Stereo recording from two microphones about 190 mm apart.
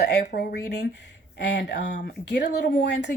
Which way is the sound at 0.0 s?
60° left (ahead or behind).